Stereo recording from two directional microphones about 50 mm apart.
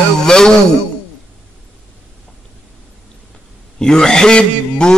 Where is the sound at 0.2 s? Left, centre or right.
Centre.